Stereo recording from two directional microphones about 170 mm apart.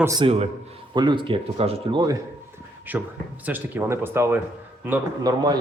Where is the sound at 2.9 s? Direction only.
10° right (ahead or behind).